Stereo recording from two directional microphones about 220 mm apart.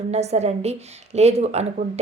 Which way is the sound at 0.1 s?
30° right (ahead or behind).